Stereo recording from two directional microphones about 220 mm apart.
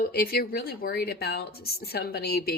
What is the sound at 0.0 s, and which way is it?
Speech, 45° left (ahead or behind).